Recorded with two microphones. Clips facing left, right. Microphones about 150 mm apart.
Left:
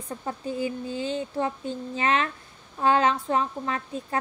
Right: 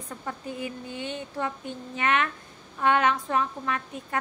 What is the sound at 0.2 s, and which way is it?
Speech, 30° left (ahead or behind).